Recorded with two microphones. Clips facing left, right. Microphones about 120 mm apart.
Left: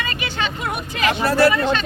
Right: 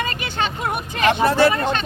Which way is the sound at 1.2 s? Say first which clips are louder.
Left 1 dB; 25° right (ahead or behind).